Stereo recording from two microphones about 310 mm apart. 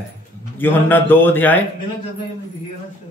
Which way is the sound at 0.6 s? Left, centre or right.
Centre.